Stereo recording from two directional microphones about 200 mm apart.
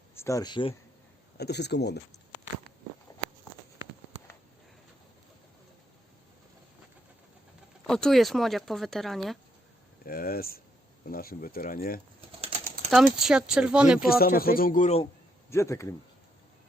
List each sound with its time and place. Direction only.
0.2 s speech: 15° left (ahead or behind)
1.4 s speech: 55° left (ahead or behind)
7.9 s speech: 5° left (ahead or behind)
10.0 s speech: 45° left (ahead or behind)
12.9 s speech: centre (ahead or behind)
14.1 s speech: 50° left (ahead or behind)
15.4 s speech: 15° left (ahead or behind)